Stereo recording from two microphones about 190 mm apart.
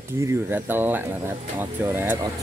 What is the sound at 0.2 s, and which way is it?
Speech, 15° right (ahead or behind).